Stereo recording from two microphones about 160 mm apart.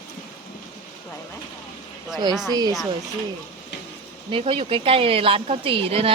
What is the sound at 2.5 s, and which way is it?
Speech, 25° right (ahead or behind).